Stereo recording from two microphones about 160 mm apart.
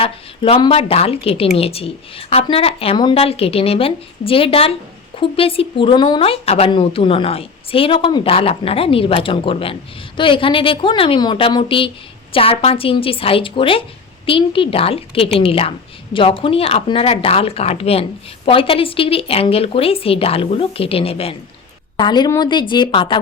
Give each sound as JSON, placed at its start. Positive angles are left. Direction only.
{"t": 0.0, "sound": "a woman's voice", "side_deg": 35}
{"t": 21.9, "sound": "speech", "side_deg": 25}